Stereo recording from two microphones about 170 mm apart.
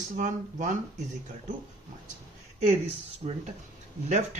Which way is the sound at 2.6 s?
40° right (ahead or behind).